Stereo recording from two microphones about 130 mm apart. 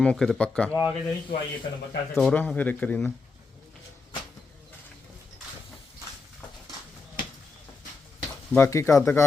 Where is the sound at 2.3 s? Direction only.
10° left (ahead or behind).